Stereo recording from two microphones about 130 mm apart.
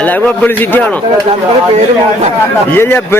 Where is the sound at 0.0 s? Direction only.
10° left (ahead or behind).